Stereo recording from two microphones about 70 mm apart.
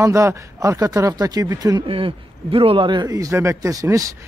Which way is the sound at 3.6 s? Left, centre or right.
Right.